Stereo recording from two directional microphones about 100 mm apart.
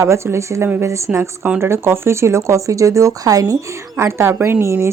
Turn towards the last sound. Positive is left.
turn(degrees=-30)  # may be behind; listen again after turning